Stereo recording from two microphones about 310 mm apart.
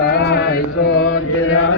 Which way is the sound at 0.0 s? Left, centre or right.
Left.